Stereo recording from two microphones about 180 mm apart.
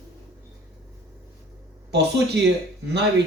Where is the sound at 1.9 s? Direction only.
70° right (ahead or behind).